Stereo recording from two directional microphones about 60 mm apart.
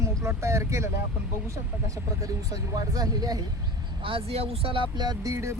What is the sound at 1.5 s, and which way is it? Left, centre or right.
Speech, right.